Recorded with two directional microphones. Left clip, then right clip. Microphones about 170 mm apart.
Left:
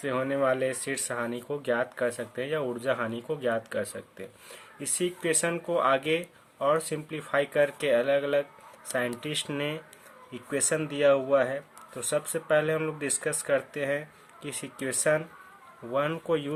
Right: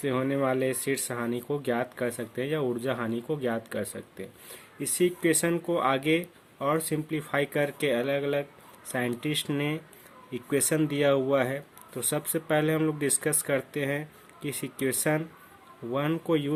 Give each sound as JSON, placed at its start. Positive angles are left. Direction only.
{"t": 0.0, "sound": "speech", "side_deg": -25}